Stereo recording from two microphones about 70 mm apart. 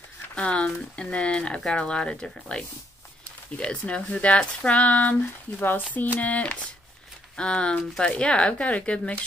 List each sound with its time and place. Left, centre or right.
0.4 s speech: centre